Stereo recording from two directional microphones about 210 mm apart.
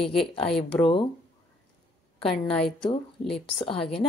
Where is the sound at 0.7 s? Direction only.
25° left (ahead or behind).